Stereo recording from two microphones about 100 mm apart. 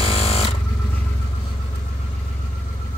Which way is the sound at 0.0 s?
75° left (ahead or behind).